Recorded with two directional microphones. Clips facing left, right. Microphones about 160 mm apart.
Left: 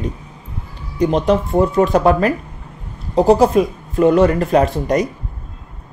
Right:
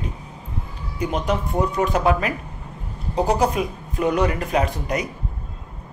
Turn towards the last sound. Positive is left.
turn(degrees=40)  # may be behind; listen again after turning